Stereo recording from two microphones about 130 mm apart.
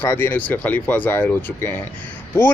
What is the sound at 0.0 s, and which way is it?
Speech, 15° left (ahead or behind).